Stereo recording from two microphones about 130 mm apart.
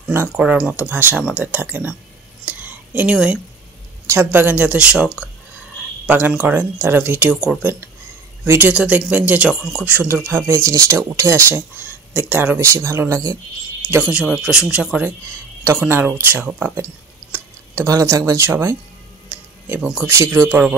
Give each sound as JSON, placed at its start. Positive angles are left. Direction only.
{"t": 0.4, "sound": "speech", "side_deg": -10}
{"t": 2.4, "sound": "a sound", "side_deg": -10}
{"t": 4.1, "sound": "speech", "side_deg": -15}
{"t": 13.8, "sound": "speech", "side_deg": -10}
{"t": 19.2, "sound": "speech", "side_deg": -10}